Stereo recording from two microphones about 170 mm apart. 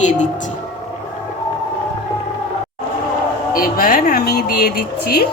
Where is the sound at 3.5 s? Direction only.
55° left (ahead or behind).